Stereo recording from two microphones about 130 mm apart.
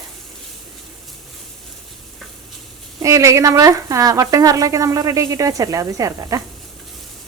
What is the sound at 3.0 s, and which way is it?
Speech, 25° right (ahead or behind).